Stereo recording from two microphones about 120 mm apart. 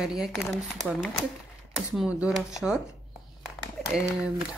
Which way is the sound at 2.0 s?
10° right (ahead or behind).